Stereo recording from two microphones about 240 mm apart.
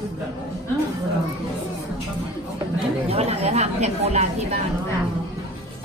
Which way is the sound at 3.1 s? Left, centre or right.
Right.